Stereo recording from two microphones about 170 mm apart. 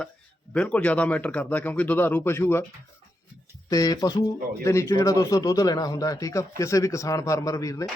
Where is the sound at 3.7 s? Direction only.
20° left (ahead or behind).